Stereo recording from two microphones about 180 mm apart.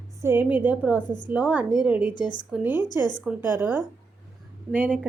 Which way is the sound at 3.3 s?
10° right (ahead or behind).